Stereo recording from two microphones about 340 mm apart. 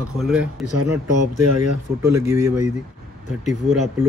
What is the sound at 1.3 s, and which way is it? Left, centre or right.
Speech, right.